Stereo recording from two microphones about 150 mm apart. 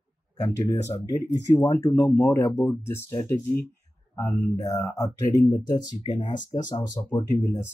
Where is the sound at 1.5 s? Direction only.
25° left (ahead or behind).